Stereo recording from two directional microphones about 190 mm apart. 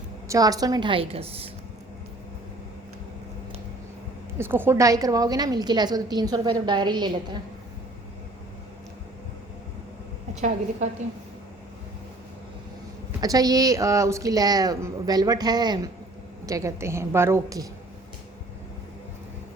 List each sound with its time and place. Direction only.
0.3 s a woman's voice: 20° right (ahead or behind)
4.4 s a woman's voice: 10° right (ahead or behind)
13.2 s a woman's voice: 20° right (ahead or behind)